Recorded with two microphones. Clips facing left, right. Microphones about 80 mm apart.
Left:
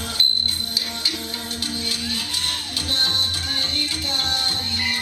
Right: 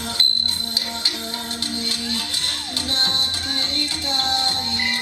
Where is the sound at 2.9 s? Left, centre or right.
Right.